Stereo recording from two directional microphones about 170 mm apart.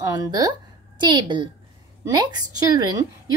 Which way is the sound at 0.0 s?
20° right (ahead or behind).